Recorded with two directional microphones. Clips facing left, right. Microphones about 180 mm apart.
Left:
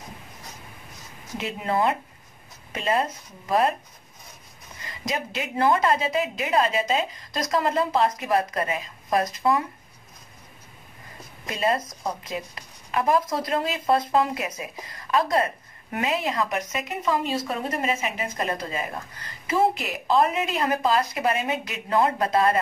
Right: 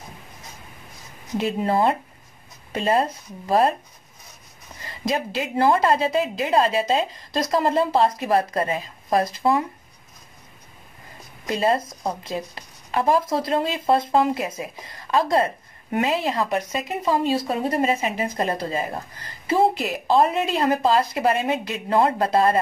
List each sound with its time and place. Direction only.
1.4 s a woman's voice: 35° right (ahead or behind)
4.8 s a woman's voice: 30° right (ahead or behind)
11.4 s speech: 30° right (ahead or behind)